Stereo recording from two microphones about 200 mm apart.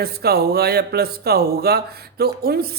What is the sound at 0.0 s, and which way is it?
Speech, 50° right (ahead or behind).